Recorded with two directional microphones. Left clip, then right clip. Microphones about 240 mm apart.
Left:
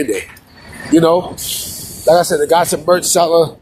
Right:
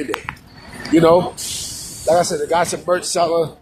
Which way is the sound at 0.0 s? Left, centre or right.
Left.